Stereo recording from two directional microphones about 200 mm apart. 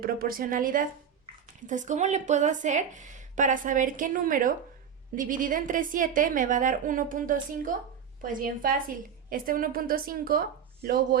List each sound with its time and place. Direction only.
0.0 s a woman's voice: 45° right (ahead or behind)